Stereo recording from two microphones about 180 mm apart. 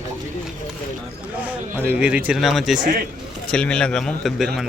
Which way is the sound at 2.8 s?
50° right (ahead or behind).